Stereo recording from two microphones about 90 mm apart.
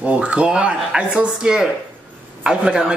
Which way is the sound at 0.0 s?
10° right (ahead or behind).